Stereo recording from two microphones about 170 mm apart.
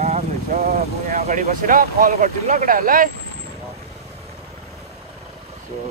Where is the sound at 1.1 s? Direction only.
50° right (ahead or behind).